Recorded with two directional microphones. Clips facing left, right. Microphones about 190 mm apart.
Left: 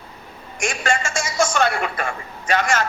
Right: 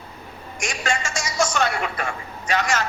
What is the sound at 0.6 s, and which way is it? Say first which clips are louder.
A man's voice: left 4 dB; 50° left (ahead or behind).